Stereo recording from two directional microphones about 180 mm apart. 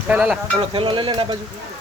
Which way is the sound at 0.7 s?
30° right (ahead or behind).